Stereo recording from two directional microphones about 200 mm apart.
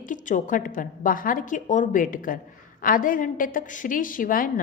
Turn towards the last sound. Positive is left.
turn(degrees=45)  # may be behind; listen again after turning